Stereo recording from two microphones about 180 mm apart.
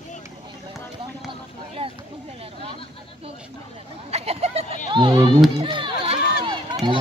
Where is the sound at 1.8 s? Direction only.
30° right (ahead or behind).